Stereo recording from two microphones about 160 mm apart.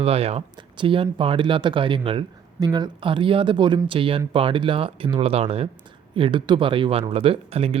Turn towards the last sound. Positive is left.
turn(degrees=-35)  # may be behind; listen again after turning